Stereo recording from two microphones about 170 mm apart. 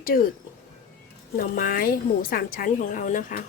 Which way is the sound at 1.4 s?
55° left (ahead or behind).